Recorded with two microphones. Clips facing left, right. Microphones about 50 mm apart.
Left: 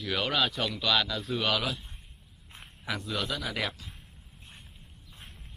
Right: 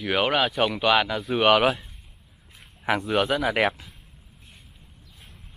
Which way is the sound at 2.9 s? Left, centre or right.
Right.